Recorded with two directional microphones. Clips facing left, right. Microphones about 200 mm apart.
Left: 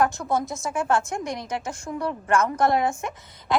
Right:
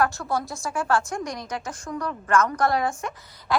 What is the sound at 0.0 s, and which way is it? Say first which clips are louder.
A woman's voice: left 2 dB; 20° left (ahead or behind).